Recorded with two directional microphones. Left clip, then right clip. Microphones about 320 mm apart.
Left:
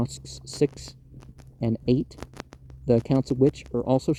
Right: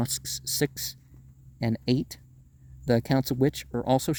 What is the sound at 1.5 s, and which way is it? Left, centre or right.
Speech, right.